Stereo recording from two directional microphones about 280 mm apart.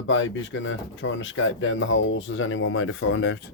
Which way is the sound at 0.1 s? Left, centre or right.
Left.